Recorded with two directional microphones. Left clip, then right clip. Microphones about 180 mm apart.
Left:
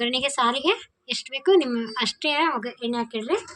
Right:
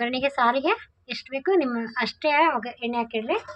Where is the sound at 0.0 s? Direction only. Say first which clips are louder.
Even; 15° right (ahead or behind).